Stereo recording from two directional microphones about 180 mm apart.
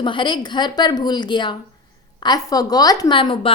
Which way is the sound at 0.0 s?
25° left (ahead or behind).